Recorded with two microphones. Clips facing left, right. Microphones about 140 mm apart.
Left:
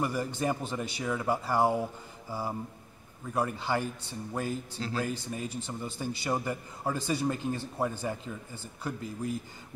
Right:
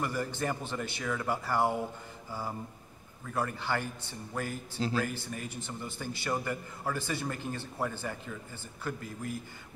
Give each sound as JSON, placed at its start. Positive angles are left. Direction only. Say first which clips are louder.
{"t": 0.0, "sound": "a man's voice", "louder": "left 3 dB", "side_deg": 15}
{"t": 3.3, "sound": "a man's voice", "louder": "left 3 dB", "side_deg": 15}